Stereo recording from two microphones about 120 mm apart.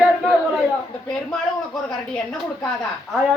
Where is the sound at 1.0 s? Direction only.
5° left (ahead or behind).